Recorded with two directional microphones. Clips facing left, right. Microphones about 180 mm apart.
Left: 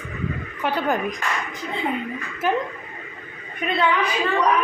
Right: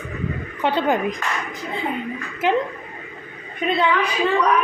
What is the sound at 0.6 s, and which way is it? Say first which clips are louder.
Speech: right 3 dB; 25° right (ahead or behind).